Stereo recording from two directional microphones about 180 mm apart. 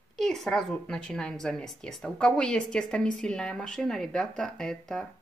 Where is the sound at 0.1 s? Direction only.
Centre (ahead or behind).